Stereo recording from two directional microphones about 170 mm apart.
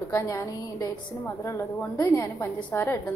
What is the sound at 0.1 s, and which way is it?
A woman's voice, 15° left (ahead or behind).